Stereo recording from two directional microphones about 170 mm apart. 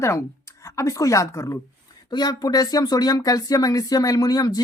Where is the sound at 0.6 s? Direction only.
20° left (ahead or behind).